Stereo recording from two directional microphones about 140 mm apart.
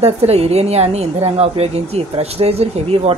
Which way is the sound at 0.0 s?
45° right (ahead or behind).